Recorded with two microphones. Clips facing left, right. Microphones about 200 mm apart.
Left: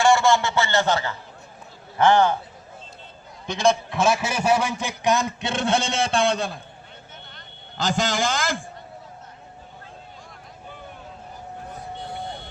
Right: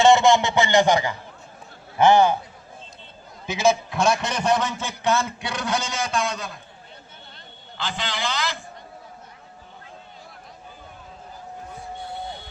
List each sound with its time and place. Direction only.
0.0 s a man's voice: 20° right (ahead or behind)
3.4 s a man's voice: 5° right (ahead or behind); by 6.6 s 30° left (ahead or behind)
7.8 s a man's voice: 45° left (ahead or behind)